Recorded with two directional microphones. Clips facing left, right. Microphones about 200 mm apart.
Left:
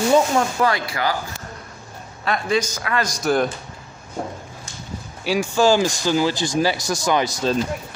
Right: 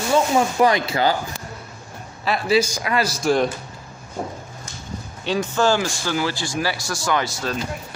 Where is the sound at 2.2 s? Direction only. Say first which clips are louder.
Right 2 dB; 5° right (ahead or behind).